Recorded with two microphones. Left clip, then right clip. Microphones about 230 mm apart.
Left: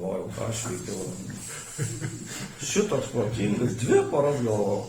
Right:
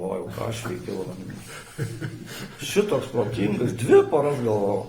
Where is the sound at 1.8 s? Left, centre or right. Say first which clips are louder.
Right 2 dB; right.